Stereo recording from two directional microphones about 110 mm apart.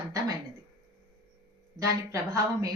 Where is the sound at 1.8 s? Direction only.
30° right (ahead or behind).